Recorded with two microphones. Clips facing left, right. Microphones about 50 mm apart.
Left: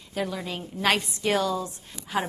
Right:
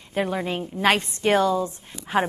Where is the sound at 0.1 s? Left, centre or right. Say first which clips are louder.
Right 5 dB; right.